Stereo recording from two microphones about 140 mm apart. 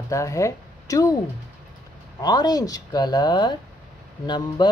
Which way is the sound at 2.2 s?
30° left (ahead or behind).